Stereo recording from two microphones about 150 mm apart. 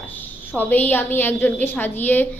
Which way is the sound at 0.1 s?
10° left (ahead or behind).